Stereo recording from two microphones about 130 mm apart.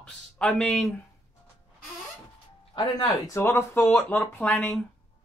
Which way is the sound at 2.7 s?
35° left (ahead or behind).